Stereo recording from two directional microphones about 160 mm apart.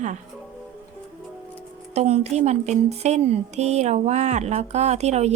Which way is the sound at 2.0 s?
45° right (ahead or behind).